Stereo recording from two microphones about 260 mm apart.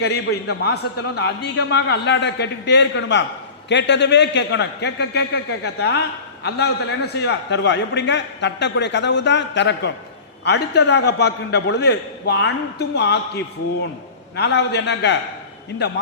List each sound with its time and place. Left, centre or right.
0.0 s a man's voice: left
14.3 s a man's voice: left